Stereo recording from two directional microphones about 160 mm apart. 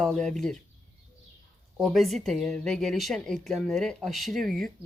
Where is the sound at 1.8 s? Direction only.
Centre (ahead or behind).